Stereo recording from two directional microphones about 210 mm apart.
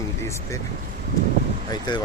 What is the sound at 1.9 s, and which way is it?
Speech, 20° left (ahead or behind).